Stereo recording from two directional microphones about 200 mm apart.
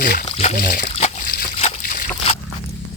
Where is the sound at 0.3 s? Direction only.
30° left (ahead or behind).